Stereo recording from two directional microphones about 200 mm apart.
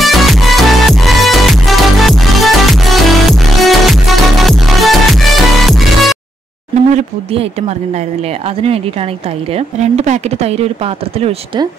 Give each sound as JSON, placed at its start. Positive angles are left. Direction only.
{"t": 0.0, "sound": "music", "side_deg": 0}
{"t": 7.0, "sound": "speech", "side_deg": -30}
{"t": 9.5, "sound": "speech", "side_deg": -30}